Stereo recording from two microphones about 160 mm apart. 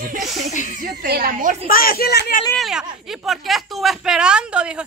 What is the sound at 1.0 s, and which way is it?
Speech, 70° right (ahead or behind).